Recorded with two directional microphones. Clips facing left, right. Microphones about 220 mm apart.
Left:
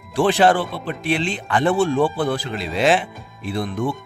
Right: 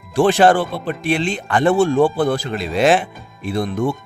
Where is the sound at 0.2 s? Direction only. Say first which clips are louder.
Right 3 dB; 45° right (ahead or behind).